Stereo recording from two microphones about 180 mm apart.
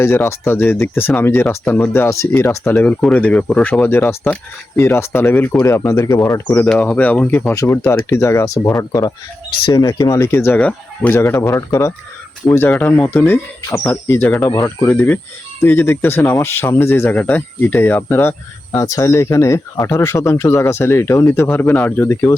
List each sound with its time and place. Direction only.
0.0 s speech: 15° left (ahead or behind)